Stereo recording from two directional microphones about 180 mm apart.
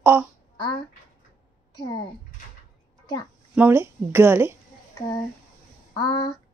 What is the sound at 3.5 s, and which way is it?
Speech, 10° right (ahead or behind).